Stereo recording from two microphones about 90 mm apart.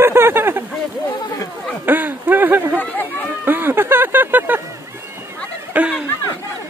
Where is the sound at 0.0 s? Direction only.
25° right (ahead or behind).